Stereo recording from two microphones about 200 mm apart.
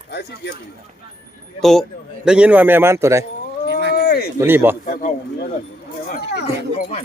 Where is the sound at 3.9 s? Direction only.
50° left (ahead or behind).